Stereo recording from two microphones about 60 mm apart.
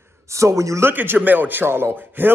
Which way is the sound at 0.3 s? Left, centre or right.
Right.